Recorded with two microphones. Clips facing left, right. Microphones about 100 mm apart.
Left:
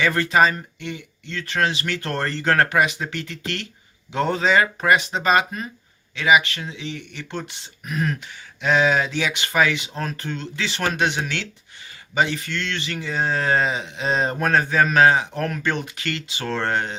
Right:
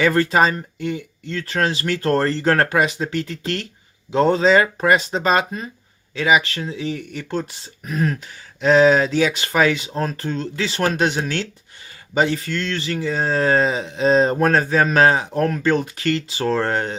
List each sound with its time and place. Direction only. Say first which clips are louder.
0.0 s speech: right 2 dB; 40° right (ahead or behind)